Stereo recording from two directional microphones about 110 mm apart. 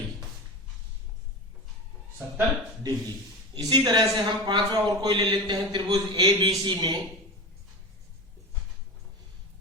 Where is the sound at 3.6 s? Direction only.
40° right (ahead or behind).